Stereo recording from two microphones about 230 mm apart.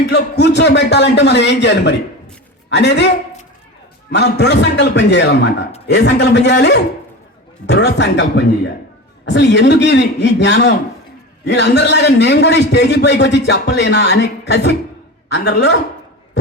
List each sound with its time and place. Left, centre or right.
0.1 s a man's voice: left
4.1 s a man's voice: left